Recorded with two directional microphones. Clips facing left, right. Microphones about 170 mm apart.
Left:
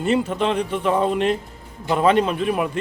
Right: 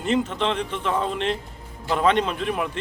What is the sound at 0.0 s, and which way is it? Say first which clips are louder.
A man's voice: left 3 dB; 10° left (ahead or behind).